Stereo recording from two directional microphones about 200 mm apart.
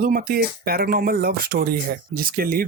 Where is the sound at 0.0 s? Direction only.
45° right (ahead or behind).